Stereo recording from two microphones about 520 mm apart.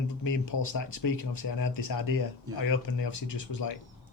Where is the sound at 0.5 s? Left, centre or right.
Left.